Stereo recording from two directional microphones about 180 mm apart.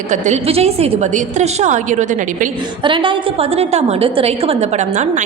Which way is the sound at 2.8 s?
30° right (ahead or behind).